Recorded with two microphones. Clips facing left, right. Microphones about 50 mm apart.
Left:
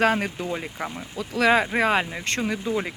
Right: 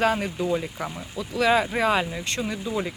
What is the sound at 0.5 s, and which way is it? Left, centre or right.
Speech, left.